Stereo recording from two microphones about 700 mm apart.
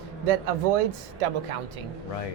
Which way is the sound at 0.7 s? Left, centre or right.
Right.